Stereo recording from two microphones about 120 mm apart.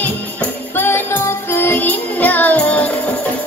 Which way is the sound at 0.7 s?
20° left (ahead or behind).